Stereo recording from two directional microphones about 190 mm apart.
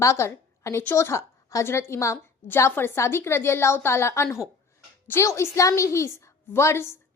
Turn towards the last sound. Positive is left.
turn(degrees=15)  # may be behind; listen again after turning